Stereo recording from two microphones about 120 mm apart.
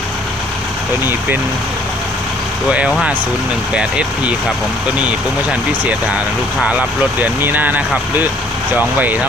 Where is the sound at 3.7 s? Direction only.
10° right (ahead or behind).